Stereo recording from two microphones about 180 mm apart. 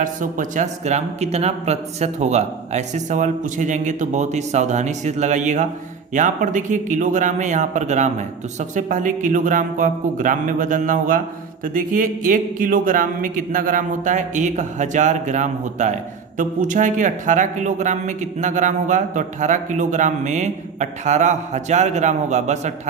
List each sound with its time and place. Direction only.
0.0 s speech: 45° right (ahead or behind)